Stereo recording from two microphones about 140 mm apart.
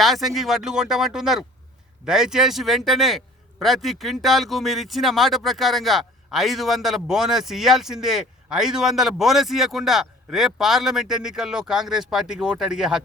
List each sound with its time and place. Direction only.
0.0 s speech: centre (ahead or behind)